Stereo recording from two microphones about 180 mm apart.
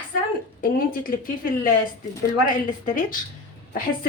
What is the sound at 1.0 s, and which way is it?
Speech, 50° left (ahead or behind).